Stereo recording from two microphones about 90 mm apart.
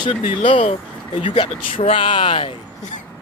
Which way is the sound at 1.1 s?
65° left (ahead or behind).